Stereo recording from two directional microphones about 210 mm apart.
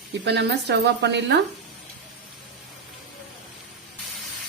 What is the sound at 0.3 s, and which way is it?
A woman's voice, 55° right (ahead or behind).